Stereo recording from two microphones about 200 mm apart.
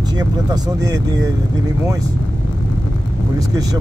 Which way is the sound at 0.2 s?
20° right (ahead or behind).